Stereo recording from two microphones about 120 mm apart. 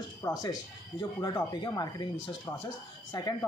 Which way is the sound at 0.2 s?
35° left (ahead or behind).